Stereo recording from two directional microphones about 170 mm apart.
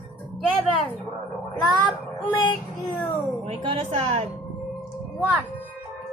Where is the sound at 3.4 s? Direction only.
35° right (ahead or behind).